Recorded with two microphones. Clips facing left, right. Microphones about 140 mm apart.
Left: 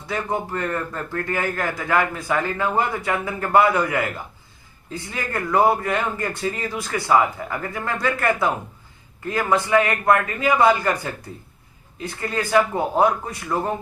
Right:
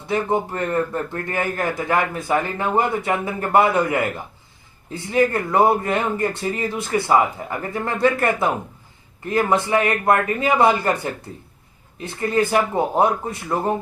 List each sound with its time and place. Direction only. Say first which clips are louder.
0.1 s a man's voice: right 4 dB; 25° right (ahead or behind)